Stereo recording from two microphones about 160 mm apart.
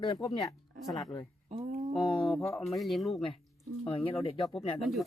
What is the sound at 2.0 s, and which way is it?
Speech, 35° left (ahead or behind).